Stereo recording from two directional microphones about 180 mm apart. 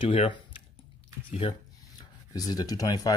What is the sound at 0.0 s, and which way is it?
Speech, 30° left (ahead or behind).